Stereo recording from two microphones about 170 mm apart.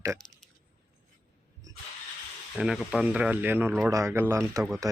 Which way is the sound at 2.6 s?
5° right (ahead or behind).